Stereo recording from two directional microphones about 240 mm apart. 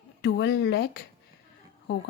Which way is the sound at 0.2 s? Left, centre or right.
Left.